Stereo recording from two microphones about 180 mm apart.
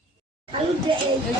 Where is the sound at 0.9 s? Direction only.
25° right (ahead or behind).